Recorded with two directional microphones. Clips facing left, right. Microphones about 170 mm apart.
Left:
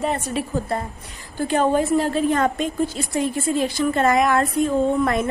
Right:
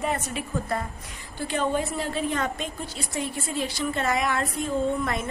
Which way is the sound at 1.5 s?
45° left (ahead or behind).